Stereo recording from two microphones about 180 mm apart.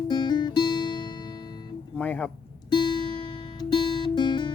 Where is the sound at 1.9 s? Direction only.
10° left (ahead or behind).